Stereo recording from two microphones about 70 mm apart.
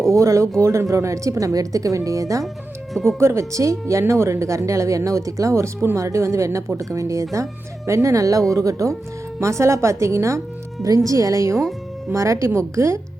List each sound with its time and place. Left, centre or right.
0.1 s speech: right
2.9 s speech: centre
3.2 s a woman's voice: right